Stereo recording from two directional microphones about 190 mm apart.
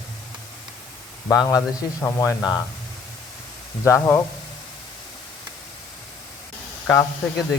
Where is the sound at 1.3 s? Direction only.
15° left (ahead or behind).